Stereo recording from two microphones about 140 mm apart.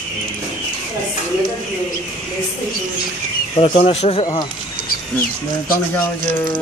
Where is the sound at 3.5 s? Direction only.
40° left (ahead or behind).